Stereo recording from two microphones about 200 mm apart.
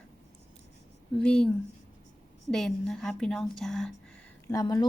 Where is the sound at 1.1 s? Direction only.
5° left (ahead or behind).